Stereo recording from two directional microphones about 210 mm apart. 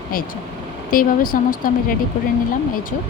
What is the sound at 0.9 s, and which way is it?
Speech, 40° left (ahead or behind).